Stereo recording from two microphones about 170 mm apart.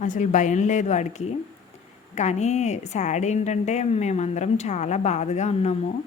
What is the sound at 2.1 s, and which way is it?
Speech, 40° left (ahead or behind).